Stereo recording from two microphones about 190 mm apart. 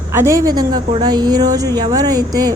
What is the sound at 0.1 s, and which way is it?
A woman's voice, 15° right (ahead or behind).